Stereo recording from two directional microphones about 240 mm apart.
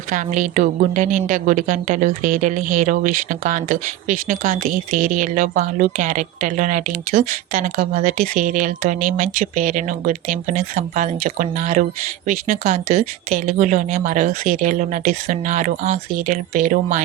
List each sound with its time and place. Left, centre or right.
0.1 s a woman's voice: right